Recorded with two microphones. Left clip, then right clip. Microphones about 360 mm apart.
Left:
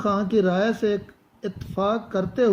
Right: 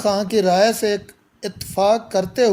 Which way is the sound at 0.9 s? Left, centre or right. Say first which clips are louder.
Right 3 dB; right.